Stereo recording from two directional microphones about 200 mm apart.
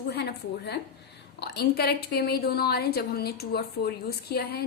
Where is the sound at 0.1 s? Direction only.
55° left (ahead or behind).